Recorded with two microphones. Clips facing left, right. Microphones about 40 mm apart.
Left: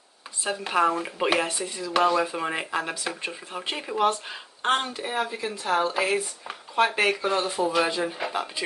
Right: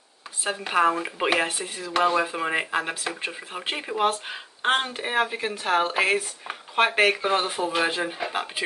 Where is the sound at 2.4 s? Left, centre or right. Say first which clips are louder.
Right 2 dB; centre.